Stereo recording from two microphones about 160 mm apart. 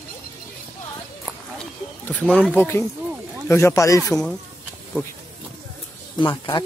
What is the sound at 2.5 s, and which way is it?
Speech, 15° left (ahead or behind).